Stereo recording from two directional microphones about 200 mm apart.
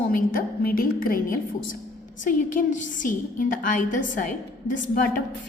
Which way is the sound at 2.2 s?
40° left (ahead or behind).